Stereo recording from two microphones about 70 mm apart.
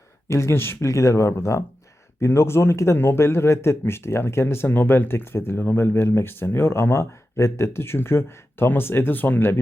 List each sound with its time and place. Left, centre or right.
0.3 s speech: left